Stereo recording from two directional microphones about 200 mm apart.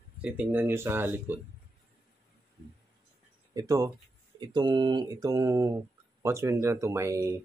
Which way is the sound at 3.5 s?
15° right (ahead or behind).